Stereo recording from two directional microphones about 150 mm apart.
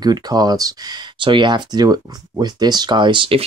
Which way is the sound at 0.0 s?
25° right (ahead or behind).